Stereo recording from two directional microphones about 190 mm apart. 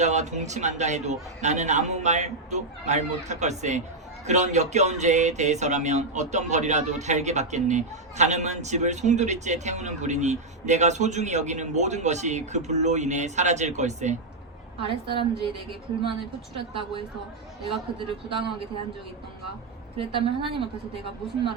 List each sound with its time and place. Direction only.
0.0 s a sound: 40° right (ahead or behind)
14.8 s a woman's voice: 30° right (ahead or behind)
16.6 s a woman's voice: 30° right (ahead or behind)
18.3 s a woman's voice: 25° right (ahead or behind)
20.0 s a woman's voice: 30° right (ahead or behind)